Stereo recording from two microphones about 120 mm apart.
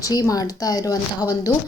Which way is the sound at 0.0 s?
30° left (ahead or behind).